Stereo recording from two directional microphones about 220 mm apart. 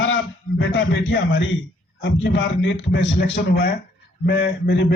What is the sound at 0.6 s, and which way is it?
A man's voice, 55° left (ahead or behind).